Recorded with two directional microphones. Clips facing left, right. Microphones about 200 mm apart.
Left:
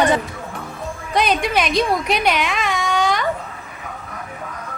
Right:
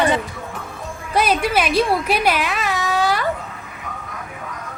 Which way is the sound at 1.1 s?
5° right (ahead or behind).